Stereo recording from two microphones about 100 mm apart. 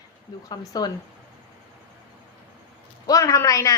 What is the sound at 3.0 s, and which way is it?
Speech, 35° left (ahead or behind).